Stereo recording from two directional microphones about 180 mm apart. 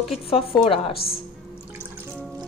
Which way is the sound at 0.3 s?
30° left (ahead or behind).